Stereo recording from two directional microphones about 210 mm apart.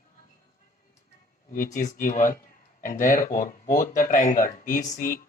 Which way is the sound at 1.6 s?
15° left (ahead or behind).